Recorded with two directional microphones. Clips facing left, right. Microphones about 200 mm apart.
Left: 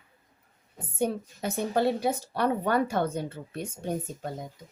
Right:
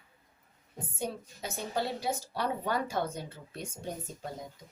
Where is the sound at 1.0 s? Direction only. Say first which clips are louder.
Left 9 dB; 60° left (ahead or behind).